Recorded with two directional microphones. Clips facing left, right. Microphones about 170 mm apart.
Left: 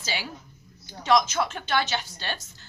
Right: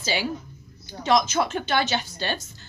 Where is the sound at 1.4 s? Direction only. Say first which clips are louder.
Right 3 dB; 20° right (ahead or behind).